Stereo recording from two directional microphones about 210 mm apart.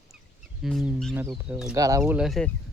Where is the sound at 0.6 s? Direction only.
Centre (ahead or behind).